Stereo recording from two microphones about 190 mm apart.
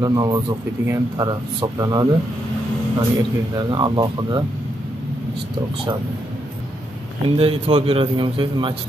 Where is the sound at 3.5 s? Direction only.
25° right (ahead or behind).